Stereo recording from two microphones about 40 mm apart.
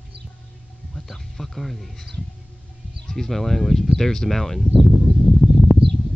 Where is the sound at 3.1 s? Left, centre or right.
Centre.